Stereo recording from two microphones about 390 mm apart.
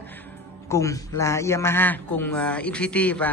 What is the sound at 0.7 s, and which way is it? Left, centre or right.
A man's voice, centre.